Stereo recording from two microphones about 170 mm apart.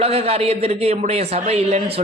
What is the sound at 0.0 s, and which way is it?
A man's voice, 35° right (ahead or behind).